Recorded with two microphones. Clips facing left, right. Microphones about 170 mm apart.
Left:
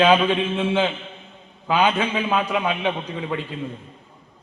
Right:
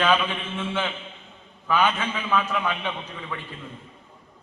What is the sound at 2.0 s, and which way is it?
Speech, 20° left (ahead or behind).